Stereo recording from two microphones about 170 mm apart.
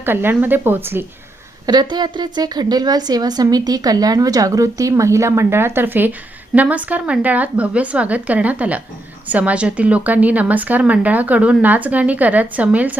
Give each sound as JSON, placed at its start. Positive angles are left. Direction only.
{"t": 0.0, "sound": "speech", "side_deg": -10}
{"t": 1.6, "sound": "a woman's voice", "side_deg": -25}